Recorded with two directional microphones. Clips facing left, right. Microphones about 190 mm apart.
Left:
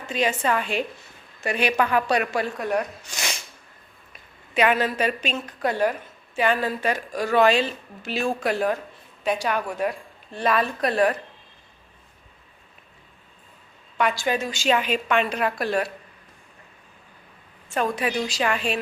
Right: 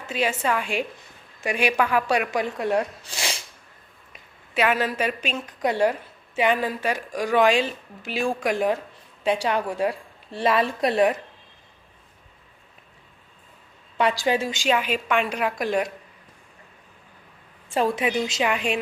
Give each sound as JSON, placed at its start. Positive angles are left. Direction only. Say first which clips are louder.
{"t": 0.1, "sound": "a woman's voice", "louder": "left 1 dB", "side_deg": -5}
{"t": 4.5, "sound": "a woman's voice", "louder": "left 1 dB", "side_deg": -5}
{"t": 14.0, "sound": "a woman's voice", "louder": "right 2 dB", "side_deg": -30}
{"t": 14.5, "sound": "a woman's voice", "louder": "left 1 dB", "side_deg": -10}
{"t": 17.7, "sound": "a woman's voice", "louder": "right 2 dB", "side_deg": -25}